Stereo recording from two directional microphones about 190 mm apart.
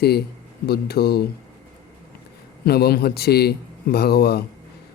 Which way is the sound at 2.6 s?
55° left (ahead or behind).